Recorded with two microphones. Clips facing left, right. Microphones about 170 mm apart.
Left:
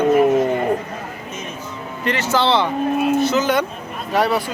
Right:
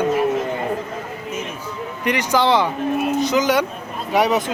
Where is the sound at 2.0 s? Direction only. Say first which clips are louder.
Right 1 dB; 15° right (ahead or behind).